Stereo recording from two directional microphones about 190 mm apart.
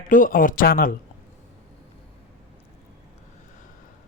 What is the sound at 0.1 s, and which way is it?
Speech, 45° left (ahead or behind).